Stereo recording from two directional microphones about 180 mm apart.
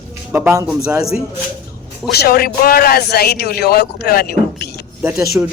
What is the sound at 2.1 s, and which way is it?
Speech, 60° left (ahead or behind).